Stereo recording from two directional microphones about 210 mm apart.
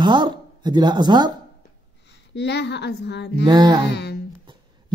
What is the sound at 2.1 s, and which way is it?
A woman's voice, 55° left (ahead or behind).